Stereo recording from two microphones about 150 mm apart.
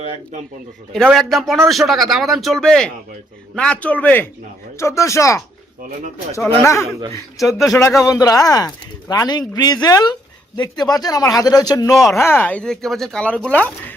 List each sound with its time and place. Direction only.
1.1 s speech: centre (ahead or behind); by 6.9 s 20° left (ahead or behind)
7.3 s speech: centre (ahead or behind)
8.0 s speech: 25° left (ahead or behind)